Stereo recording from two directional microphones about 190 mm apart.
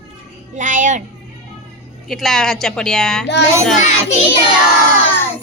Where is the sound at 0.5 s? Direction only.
40° right (ahead or behind).